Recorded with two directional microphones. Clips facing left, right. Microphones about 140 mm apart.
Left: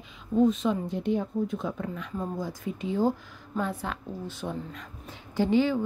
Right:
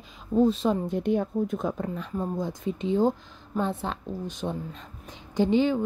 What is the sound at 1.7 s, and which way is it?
Speech, 35° right (ahead or behind).